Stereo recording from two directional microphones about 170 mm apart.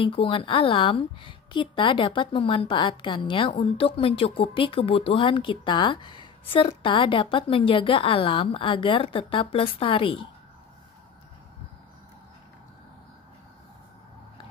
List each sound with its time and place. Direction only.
0.0 s a woman's voice: 30° left (ahead or behind)